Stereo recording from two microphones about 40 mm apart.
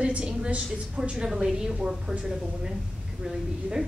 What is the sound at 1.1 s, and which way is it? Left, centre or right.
Speech, centre.